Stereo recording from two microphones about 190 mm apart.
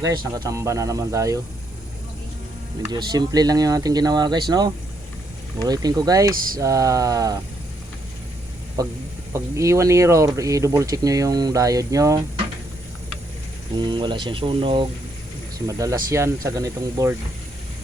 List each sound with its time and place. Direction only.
0.0 s speech: 15° right (ahead or behind)
2.9 s speech: 20° right (ahead or behind)
8.8 s speech: 20° right (ahead or behind)
13.7 s speech: 25° right (ahead or behind)